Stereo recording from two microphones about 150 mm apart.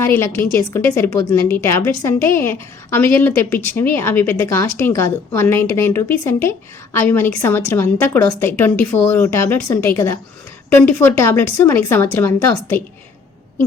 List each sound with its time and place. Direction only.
0.0 s a woman's voice: 15° left (ahead or behind)